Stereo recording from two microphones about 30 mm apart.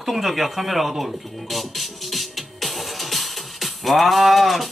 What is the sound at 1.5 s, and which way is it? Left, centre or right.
Music, centre.